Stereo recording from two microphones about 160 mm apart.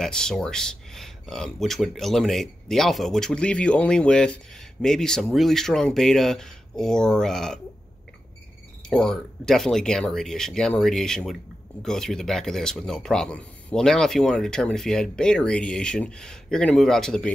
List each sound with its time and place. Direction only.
0.0 s speech: 5° left (ahead or behind)
8.8 s speech: 5° left (ahead or behind)